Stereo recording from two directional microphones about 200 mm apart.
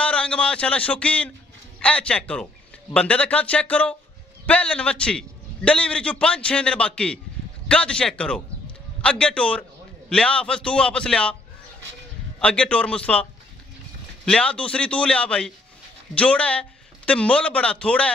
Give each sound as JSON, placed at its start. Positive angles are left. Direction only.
{"t": 0.0, "sound": "a man's voice", "side_deg": 5}
{"t": 12.4, "sound": "a man's voice", "side_deg": 5}